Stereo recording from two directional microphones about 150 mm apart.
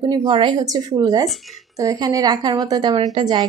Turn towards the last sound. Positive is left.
turn(degrees=-30)  # may be behind; listen again after turning